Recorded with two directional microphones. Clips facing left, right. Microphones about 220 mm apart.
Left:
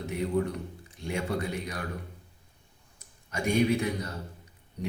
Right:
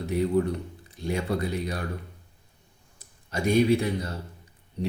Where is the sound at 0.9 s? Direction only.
35° right (ahead or behind).